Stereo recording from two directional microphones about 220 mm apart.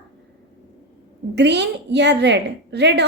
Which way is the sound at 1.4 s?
50° right (ahead or behind).